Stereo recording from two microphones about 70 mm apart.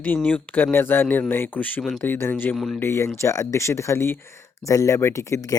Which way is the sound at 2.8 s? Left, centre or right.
Left.